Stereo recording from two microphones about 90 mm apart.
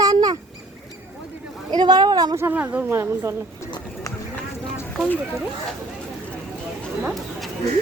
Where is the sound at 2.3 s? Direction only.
25° right (ahead or behind).